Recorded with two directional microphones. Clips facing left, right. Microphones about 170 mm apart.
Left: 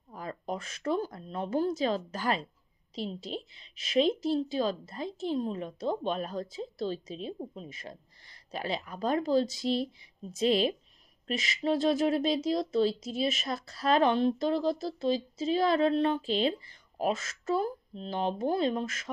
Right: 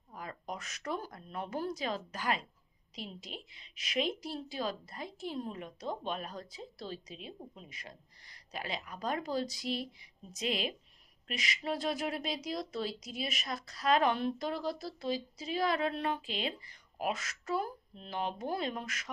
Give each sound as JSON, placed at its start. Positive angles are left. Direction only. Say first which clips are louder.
{"t": 0.1, "sound": "a woman's voice", "louder": "left 6 dB", "side_deg": 30}